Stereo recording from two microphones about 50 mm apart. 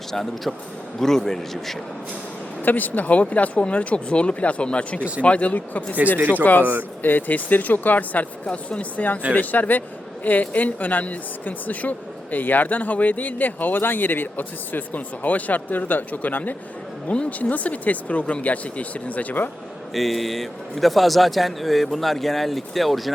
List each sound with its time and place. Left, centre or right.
0.1 s a man's voice: centre
2.6 s speech: left
4.9 s speech: right
5.2 s a woman's voice: left
19.9 s a man's voice: centre